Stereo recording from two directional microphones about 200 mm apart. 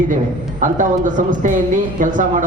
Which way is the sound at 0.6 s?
40° right (ahead or behind).